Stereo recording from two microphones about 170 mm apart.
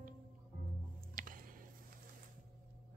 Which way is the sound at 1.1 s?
55° right (ahead or behind).